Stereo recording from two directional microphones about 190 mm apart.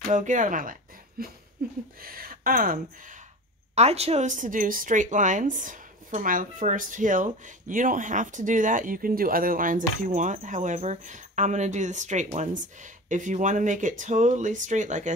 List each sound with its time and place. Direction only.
0.1 s speech: 40° right (ahead or behind)
3.7 s speech: 35° right (ahead or behind)